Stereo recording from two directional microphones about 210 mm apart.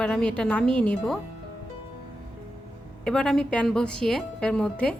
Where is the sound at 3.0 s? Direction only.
5° left (ahead or behind).